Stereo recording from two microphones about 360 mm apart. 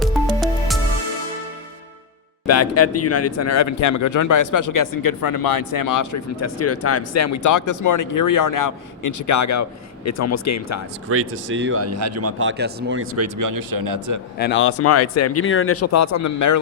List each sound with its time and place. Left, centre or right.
2.5 s a man's voice: left
11.1 s a man's voice: right
13.5 s speech: right
14.3 s speech: left